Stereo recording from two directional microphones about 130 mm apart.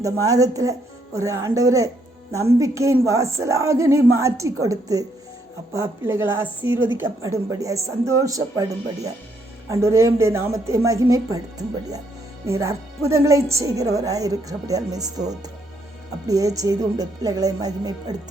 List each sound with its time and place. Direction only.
0.0 s a woman's voice: 25° right (ahead or behind)
9.6 s a woman's voice: 25° right (ahead or behind)